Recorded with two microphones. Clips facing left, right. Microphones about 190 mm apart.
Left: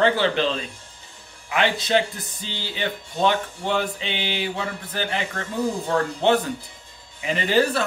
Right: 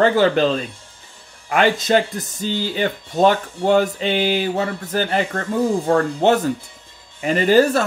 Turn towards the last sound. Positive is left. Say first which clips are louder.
# right 6 dB
turn(degrees=-45)  # may be behind; listen again after turning